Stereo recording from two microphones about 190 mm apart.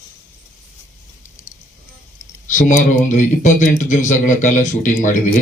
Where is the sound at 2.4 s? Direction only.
40° left (ahead or behind).